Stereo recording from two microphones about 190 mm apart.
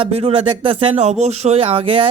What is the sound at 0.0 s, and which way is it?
Speech, 30° right (ahead or behind).